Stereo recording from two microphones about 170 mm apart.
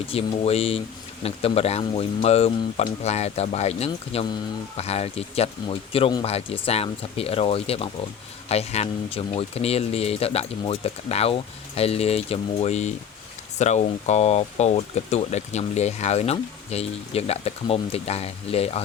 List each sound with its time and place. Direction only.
0.1 s speech: 35° left (ahead or behind)